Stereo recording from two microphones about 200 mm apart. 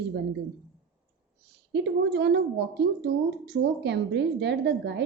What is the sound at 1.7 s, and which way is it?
Speech, 60° right (ahead or behind).